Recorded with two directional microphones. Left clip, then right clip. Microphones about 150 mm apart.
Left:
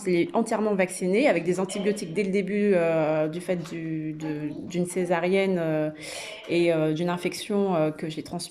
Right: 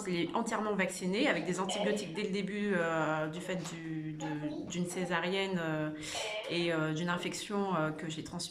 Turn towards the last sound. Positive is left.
turn(degrees=30)  # may be behind; listen again after turning